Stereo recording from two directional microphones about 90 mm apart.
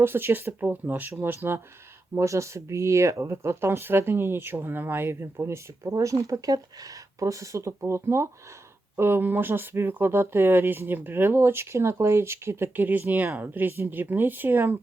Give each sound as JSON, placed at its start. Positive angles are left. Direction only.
{"t": 0.0, "sound": "speech", "side_deg": -25}